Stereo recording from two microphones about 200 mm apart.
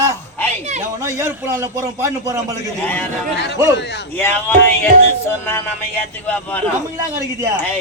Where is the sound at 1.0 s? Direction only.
15° right (ahead or behind).